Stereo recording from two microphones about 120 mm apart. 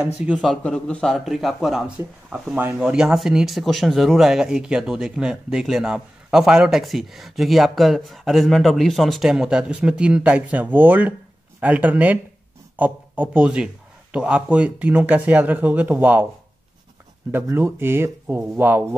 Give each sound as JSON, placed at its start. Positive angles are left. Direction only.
{"t": 0.0, "sound": "speech", "side_deg": -10}
{"t": 0.7, "sound": "speech", "side_deg": 5}
{"t": 17.3, "sound": "speech", "side_deg": -20}